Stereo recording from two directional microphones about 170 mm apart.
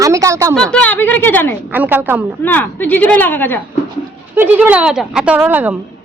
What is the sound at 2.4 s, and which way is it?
Speech, 10° left (ahead or behind).